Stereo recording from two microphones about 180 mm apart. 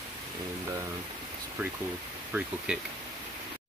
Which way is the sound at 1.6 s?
10° right (ahead or behind).